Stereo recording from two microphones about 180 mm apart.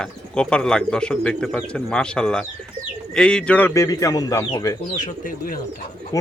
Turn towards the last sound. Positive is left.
turn(degrees=20)  # may be behind; listen again after turning